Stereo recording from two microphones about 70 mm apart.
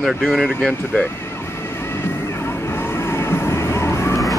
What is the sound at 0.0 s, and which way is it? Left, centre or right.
Speech, centre.